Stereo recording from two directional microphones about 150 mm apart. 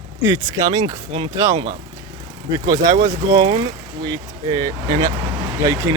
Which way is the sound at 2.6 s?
25° right (ahead or behind).